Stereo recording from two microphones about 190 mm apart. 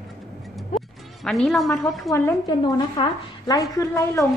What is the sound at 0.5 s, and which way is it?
Music, centre (ahead or behind).